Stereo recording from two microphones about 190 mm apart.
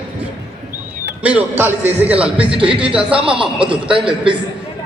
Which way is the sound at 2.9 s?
5° right (ahead or behind).